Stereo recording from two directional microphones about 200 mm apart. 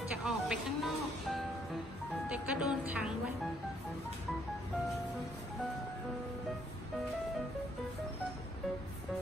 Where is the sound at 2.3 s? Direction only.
5° right (ahead or behind).